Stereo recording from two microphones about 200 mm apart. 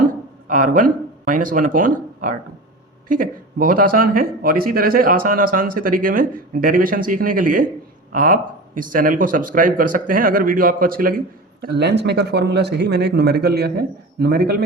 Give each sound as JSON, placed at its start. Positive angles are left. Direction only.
{"t": 0.0, "sound": "speech", "side_deg": -45}
{"t": 11.6, "sound": "speech", "side_deg": -55}